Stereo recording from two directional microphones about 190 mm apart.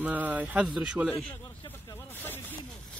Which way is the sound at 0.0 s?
10° right (ahead or behind).